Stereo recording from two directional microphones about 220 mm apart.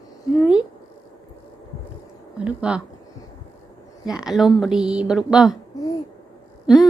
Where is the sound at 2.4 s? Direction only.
5° right (ahead or behind).